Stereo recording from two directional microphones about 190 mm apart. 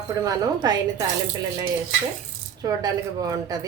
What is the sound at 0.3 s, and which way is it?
Speech, 20° right (ahead or behind).